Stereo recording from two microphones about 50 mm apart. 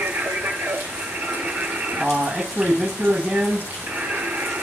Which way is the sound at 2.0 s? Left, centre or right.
Centre.